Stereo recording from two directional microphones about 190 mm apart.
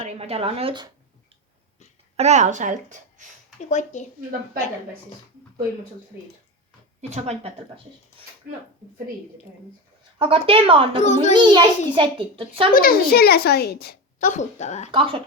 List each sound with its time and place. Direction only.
0.0 s a woman's voice: 35° right (ahead or behind)
2.1 s a woman's voice: 35° right (ahead or behind)
3.7 s speech: 40° left (ahead or behind)
10.2 s a child's voice: 30° right (ahead or behind)
11.0 s speech: 40° left (ahead or behind)
11.3 s a child's voice: 25° right (ahead or behind)
12.7 s speech: 50° left (ahead or behind)
14.9 s a child's voice: 30° right (ahead or behind)